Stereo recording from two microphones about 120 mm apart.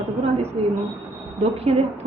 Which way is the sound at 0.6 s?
55° right (ahead or behind).